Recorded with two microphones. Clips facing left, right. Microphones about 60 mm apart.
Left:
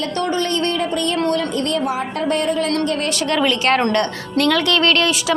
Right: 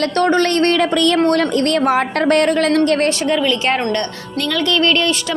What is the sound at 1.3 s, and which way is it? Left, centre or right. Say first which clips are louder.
A woman's voice: right 4 dB; right.